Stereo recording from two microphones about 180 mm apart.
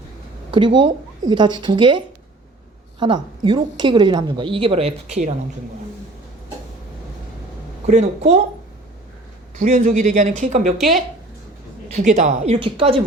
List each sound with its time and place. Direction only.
0.5 s a woman's voice: 25° right (ahead or behind)
3.0 s a woman's voice: 25° right (ahead or behind)
7.9 s speech: 40° right (ahead or behind)
9.6 s speech: 40° right (ahead or behind)
11.9 s speech: 40° right (ahead or behind)